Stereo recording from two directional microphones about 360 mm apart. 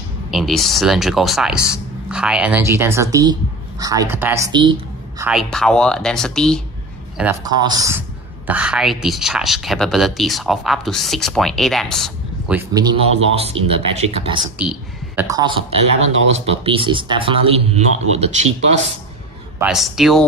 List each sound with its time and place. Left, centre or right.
0.3 s speech: centre
5.2 s speech: centre
14.6 s speech: centre
19.6 s speech: centre